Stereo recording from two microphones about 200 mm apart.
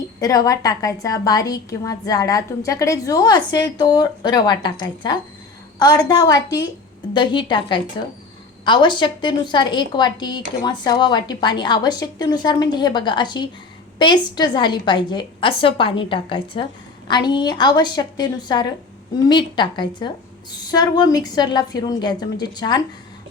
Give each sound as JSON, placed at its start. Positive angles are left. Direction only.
{"t": 0.2, "sound": "a woman's voice", "side_deg": 15}